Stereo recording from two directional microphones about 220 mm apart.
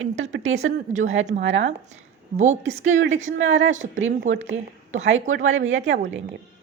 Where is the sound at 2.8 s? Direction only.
60° right (ahead or behind).